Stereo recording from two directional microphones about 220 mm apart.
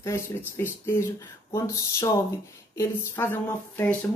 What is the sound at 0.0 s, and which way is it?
Speech, 10° left (ahead or behind).